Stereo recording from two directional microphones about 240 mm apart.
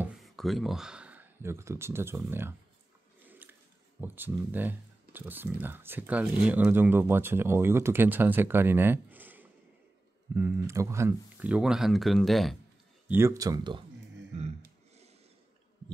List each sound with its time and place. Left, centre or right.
0.0 s speech: centre
3.3 s biting: centre
4.0 s speech: centre
13.1 s speech: centre
14.3 s a sound: right